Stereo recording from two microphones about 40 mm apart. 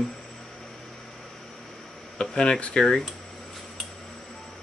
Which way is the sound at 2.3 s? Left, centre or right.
Left.